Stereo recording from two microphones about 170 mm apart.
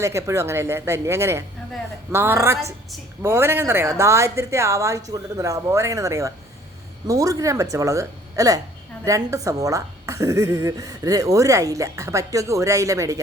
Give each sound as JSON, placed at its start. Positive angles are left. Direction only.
{"t": 0.0, "sound": "a woman's voice", "side_deg": -15}